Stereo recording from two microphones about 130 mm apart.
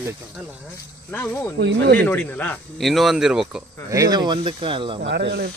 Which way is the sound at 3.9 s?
30° right (ahead or behind).